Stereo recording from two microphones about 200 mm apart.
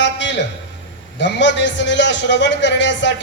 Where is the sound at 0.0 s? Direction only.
60° left (ahead or behind).